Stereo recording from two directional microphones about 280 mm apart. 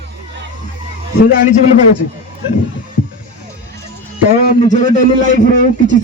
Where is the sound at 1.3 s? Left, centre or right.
Left.